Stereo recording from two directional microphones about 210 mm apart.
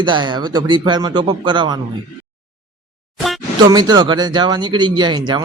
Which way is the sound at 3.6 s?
20° right (ahead or behind).